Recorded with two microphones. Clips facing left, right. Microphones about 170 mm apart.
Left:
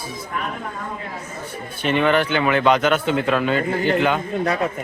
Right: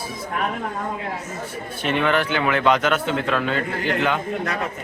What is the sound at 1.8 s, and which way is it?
A man's voice, centre (ahead or behind).